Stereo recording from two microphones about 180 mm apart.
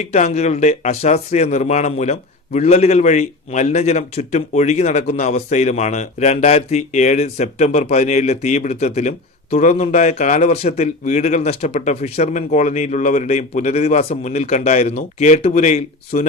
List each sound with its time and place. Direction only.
0.0 s speech: 40° left (ahead or behind)